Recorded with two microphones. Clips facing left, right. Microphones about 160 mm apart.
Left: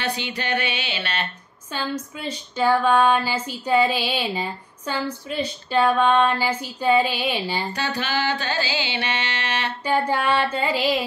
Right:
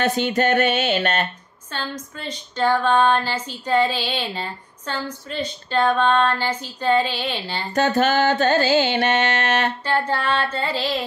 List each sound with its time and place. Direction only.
0.0 s music: 45° right (ahead or behind)
1.7 s speech: 10° left (ahead or behind)
7.7 s music: 50° right (ahead or behind)
9.8 s speech: 10° left (ahead or behind)